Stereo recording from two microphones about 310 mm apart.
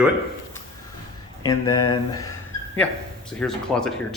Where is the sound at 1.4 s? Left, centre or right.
Centre.